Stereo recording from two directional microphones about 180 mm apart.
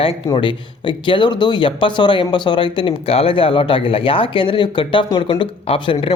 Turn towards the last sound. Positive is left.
turn(degrees=30)  # may be behind; listen again after turning